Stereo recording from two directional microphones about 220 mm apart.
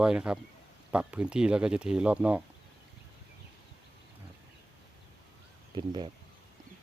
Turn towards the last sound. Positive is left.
turn(degrees=-20)  # may be behind; listen again after turning